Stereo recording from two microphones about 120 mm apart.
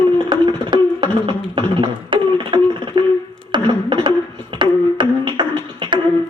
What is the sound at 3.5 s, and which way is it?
Beatboxing, 40° right (ahead or behind).